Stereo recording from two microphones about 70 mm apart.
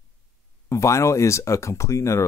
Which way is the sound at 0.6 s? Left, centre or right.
Left.